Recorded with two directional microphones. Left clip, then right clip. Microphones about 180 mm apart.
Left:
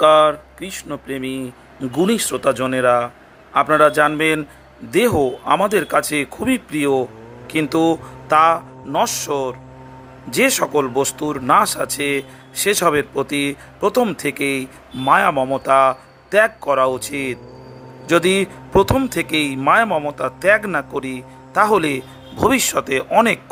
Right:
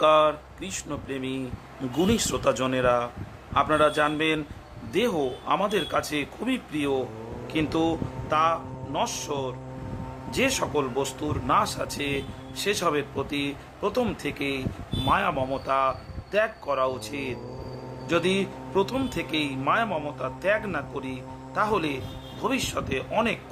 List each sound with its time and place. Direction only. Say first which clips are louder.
0.0 s speech: left 8 dB; 30° left (ahead or behind)